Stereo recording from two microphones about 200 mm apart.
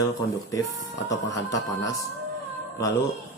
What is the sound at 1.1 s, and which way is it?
Speech, 15° left (ahead or behind).